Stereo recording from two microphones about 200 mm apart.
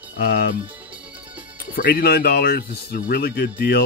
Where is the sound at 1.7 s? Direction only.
50° left (ahead or behind).